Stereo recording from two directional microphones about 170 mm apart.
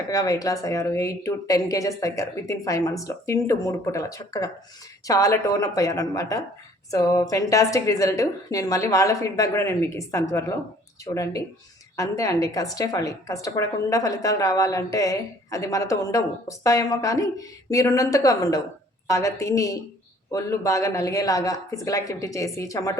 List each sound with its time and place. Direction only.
0.1 s a woman's voice: 20° left (ahead or behind)